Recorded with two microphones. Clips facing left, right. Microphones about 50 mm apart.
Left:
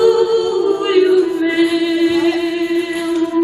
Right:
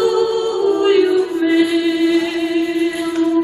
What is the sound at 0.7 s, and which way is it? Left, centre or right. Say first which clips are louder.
Music: right 1 dB; centre.